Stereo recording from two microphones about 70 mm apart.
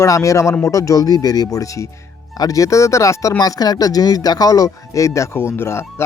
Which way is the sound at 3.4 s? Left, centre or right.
Left.